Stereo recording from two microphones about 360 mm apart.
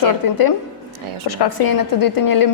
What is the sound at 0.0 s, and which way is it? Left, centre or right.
Speech, left.